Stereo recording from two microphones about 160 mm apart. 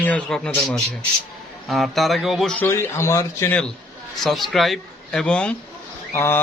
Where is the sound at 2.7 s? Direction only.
15° left (ahead or behind).